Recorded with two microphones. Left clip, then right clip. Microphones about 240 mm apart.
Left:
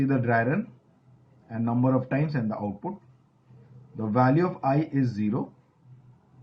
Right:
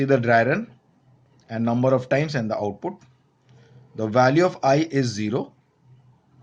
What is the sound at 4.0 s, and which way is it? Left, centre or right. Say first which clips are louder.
Speech: right 6 dB; right.